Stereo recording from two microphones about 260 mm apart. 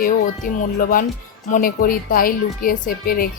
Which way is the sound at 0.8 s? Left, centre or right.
Left.